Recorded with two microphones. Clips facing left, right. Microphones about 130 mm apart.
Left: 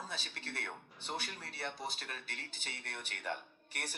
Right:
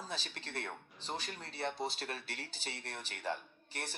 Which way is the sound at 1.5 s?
25° right (ahead or behind).